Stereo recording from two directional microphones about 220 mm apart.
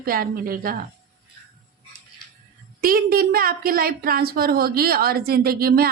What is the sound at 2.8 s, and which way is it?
A woman's voice, 40° right (ahead or behind).